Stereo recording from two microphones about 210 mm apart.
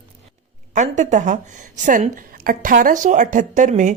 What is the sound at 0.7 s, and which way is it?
Speech, 35° right (ahead or behind).